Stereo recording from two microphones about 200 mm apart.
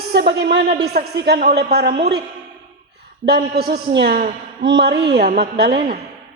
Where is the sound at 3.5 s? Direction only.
50° right (ahead or behind).